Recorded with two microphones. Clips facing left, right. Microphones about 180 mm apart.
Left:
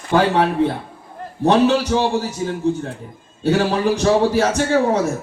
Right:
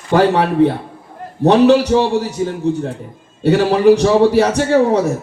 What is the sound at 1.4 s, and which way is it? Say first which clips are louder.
Speech: right 5 dB; 70° right (ahead or behind).